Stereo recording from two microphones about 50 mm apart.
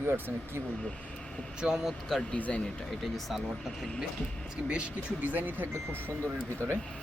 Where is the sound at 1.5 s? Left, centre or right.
Centre.